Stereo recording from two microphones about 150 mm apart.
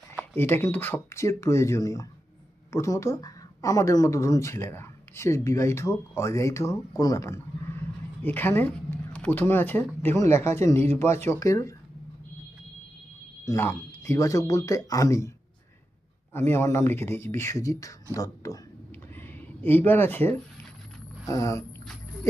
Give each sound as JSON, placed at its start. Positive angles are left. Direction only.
{"t": 0.3, "sound": "a woman's voice", "side_deg": 15}
{"t": 13.4, "sound": "a woman's voice", "side_deg": 20}
{"t": 16.3, "sound": "speech", "side_deg": 15}
{"t": 19.1, "sound": "a sound", "side_deg": 15}
{"t": 21.2, "sound": "a woman's voice", "side_deg": 20}